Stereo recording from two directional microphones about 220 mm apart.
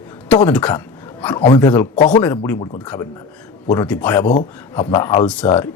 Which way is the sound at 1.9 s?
20° left (ahead or behind).